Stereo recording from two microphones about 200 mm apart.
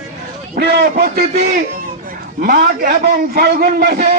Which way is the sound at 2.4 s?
45° right (ahead or behind).